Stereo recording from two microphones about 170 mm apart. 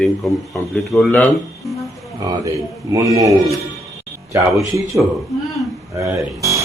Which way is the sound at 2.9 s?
20° right (ahead or behind).